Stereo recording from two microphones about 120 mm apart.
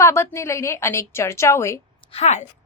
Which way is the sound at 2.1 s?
75° left (ahead or behind).